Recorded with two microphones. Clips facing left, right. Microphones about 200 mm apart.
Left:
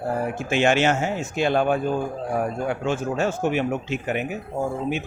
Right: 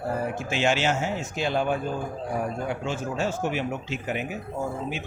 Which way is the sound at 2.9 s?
55° left (ahead or behind).